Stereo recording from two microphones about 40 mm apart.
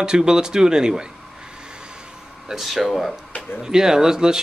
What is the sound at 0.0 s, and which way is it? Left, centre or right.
Speech, centre.